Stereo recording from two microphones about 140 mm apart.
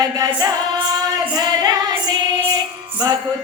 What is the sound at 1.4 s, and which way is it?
Female singing, 30° right (ahead or behind).